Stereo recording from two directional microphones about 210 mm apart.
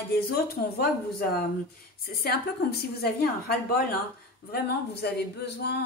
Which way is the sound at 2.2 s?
50° left (ahead or behind).